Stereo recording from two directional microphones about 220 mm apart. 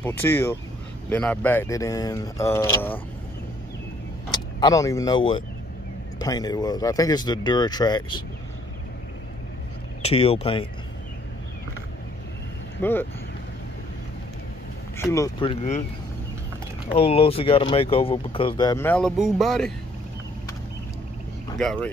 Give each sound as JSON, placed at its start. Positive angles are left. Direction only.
{"t": 0.0, "sound": "speech", "side_deg": 10}
{"t": 4.3, "sound": "speech", "side_deg": 15}
{"t": 10.0, "sound": "speech", "side_deg": 25}
{"t": 12.8, "sound": "speech", "side_deg": 10}
{"t": 15.0, "sound": "speech", "side_deg": 15}
{"t": 16.9, "sound": "speech", "side_deg": 25}
{"t": 21.5, "sound": "speech", "side_deg": 5}